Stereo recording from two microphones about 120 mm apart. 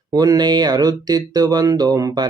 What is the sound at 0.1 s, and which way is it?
Speech, 30° right (ahead or behind).